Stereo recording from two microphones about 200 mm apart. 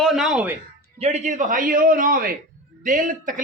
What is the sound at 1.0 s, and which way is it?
A man's voice, 35° right (ahead or behind).